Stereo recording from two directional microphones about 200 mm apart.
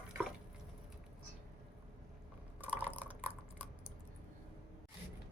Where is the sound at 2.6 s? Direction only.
10° right (ahead or behind).